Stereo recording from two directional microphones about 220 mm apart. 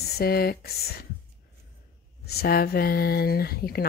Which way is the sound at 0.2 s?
45° left (ahead or behind).